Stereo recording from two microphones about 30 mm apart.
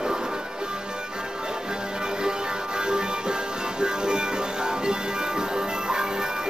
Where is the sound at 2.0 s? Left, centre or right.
Right.